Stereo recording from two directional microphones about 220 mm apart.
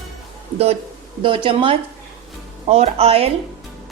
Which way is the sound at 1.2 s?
25° right (ahead or behind).